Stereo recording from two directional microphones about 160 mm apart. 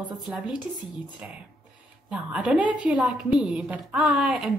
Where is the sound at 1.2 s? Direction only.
10° right (ahead or behind).